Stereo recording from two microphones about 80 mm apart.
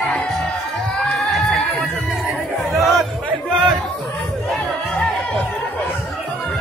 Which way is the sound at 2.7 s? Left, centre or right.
Centre.